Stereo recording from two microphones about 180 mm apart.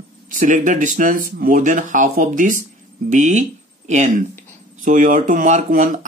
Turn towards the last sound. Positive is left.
turn(degrees=-45)  # may be behind; listen again after turning